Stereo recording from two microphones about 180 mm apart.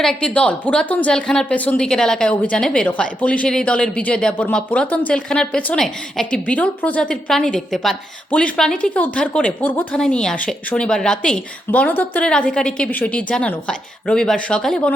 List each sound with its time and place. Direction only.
0.0 s speech: 5° left (ahead or behind)